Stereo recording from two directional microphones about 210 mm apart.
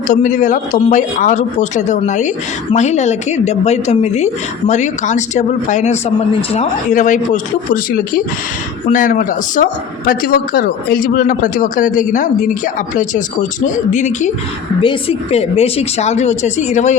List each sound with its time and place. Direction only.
0.1 s speech: 35° left (ahead or behind)
13.7 s speech: 35° left (ahead or behind)